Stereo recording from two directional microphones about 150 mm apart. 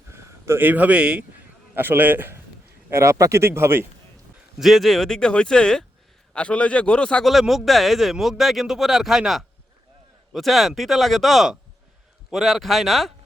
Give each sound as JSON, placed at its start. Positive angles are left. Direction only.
{"t": 0.1, "sound": "speech", "side_deg": -20}
{"t": 4.5, "sound": "a man's voice", "side_deg": 0}